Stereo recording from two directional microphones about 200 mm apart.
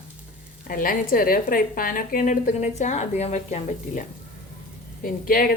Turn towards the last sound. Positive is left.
turn(degrees=45)  # may be behind; listen again after turning